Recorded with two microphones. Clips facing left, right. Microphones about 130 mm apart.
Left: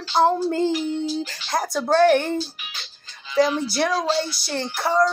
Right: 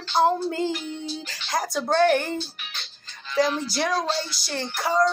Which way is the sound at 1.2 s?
55° left (ahead or behind).